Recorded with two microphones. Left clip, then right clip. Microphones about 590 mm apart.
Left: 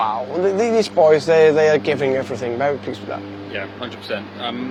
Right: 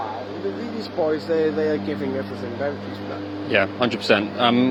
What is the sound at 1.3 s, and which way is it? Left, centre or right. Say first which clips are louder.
Speech: left 8 dB; left.